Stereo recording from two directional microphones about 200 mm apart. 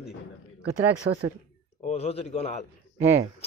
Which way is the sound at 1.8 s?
30° left (ahead or behind).